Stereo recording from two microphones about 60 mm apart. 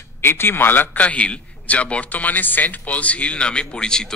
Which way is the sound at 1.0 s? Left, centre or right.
Left.